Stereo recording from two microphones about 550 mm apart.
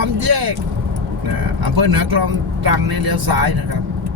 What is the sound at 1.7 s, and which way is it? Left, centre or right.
Speech, right.